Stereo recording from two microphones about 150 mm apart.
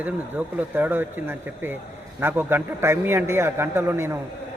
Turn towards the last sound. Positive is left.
turn(degrees=-15)  # may be behind; listen again after turning